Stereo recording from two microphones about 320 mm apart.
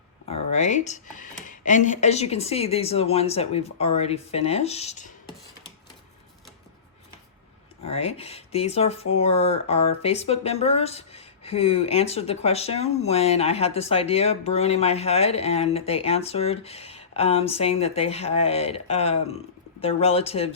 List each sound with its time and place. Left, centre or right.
0.3 s speech: centre
7.9 s speech: centre